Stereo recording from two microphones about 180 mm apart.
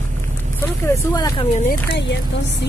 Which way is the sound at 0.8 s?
20° left (ahead or behind).